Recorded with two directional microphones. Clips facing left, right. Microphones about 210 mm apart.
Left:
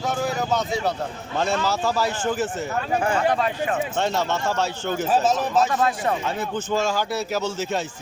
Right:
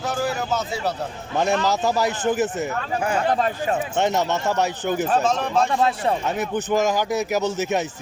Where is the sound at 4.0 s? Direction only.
20° right (ahead or behind).